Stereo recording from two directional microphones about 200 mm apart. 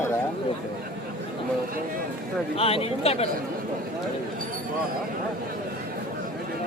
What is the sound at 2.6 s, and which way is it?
Speech, 30° left (ahead or behind).